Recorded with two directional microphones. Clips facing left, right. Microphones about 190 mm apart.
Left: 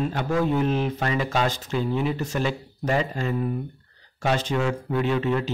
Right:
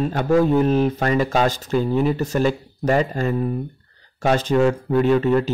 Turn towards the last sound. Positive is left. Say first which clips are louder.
# right 7 dB
turn(degrees=-45)  # may be behind; listen again after turning